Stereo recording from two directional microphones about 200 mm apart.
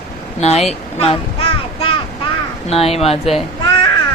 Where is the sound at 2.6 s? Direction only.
30° left (ahead or behind).